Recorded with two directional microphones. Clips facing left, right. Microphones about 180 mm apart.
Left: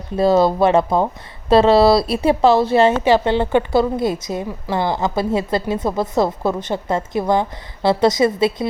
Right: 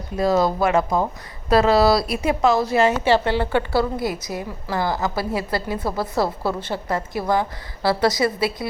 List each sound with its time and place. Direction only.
0.2 s a woman's voice: 30° left (ahead or behind)